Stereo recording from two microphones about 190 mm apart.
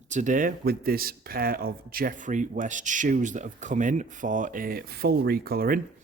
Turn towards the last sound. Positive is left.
turn(degrees=-50)  # may be behind; listen again after turning